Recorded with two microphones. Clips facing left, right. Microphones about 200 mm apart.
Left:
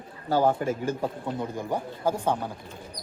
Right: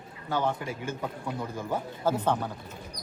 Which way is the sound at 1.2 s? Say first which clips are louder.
Left 3 dB; 20° left (ahead or behind).